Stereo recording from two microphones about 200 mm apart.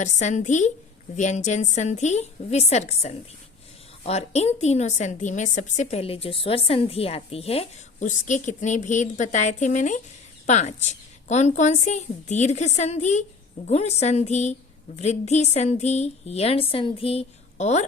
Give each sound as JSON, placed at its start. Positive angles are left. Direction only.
{"t": 0.0, "sound": "a woman's voice", "side_deg": 35}